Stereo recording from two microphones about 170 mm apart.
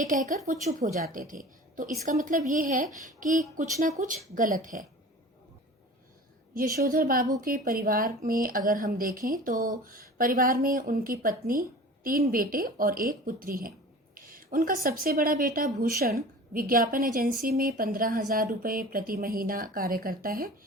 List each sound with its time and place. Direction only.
0.0 s a woman's voice: 50° right (ahead or behind)
6.5 s speech: 55° right (ahead or behind)
14.3 s a sound: 55° right (ahead or behind)
14.8 s speech: 60° right (ahead or behind)